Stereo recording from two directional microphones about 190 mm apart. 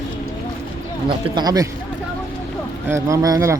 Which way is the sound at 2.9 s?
15° right (ahead or behind).